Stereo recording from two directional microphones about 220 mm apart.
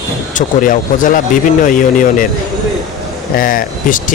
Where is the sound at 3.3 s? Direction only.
40° left (ahead or behind).